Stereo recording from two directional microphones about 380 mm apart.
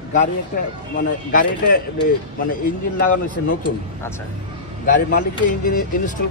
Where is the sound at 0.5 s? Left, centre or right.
Left.